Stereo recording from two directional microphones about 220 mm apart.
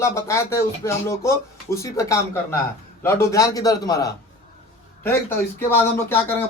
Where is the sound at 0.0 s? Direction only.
10° left (ahead or behind).